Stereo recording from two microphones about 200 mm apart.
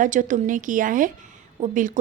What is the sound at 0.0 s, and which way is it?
A woman's voice, 40° right (ahead or behind).